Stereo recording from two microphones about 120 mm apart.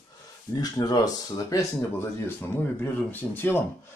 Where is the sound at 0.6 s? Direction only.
30° left (ahead or behind).